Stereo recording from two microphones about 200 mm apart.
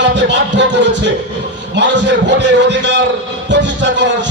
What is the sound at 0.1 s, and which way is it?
Music, 60° right (ahead or behind).